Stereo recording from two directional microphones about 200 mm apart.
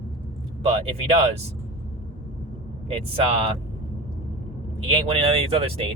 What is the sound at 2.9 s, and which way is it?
Speech, 30° right (ahead or behind).